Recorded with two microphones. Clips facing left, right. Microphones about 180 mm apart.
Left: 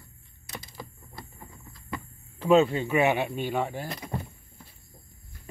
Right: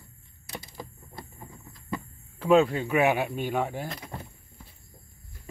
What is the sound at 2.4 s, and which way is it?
Speech, 5° right (ahead or behind).